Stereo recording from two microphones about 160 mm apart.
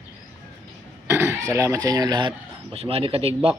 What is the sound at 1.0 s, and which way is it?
Speech, 15° right (ahead or behind).